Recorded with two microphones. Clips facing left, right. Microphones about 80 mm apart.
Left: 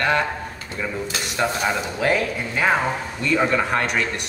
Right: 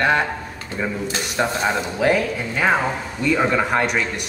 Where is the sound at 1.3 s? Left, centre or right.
Right.